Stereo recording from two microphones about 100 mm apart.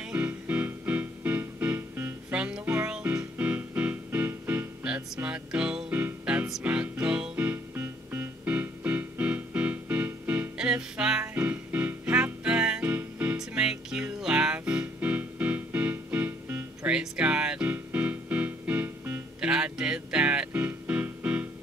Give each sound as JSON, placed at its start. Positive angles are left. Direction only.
{"t": 0.0, "sound": "music", "side_deg": -15}
{"t": 2.3, "sound": "music", "side_deg": -10}
{"t": 10.6, "sound": "music", "side_deg": -10}
{"t": 13.4, "sound": "music", "side_deg": -5}